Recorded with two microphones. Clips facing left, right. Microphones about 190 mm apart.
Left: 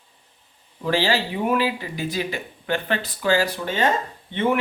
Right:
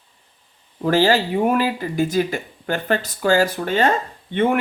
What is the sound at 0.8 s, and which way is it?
Speech, 45° right (ahead or behind).